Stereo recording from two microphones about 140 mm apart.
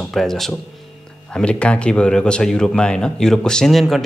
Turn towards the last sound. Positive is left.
turn(degrees=0)  # may be behind; listen again after turning